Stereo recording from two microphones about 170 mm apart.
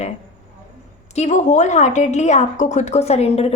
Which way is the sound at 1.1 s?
45° left (ahead or behind).